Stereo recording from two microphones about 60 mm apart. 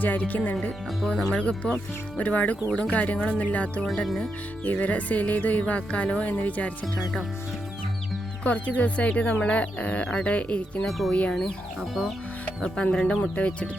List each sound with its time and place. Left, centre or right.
0.0 s speech: left
1.0 s speech: centre
3.9 s speech: centre
4.6 s speech: left
8.4 s speech: left
10.8 s speech: centre
11.1 s speech: centre
11.8 s speech: centre
12.6 s speech: centre